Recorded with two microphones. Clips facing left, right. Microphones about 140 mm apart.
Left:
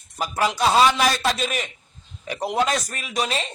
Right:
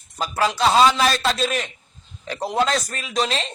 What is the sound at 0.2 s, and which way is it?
Speech, 15° left (ahead or behind).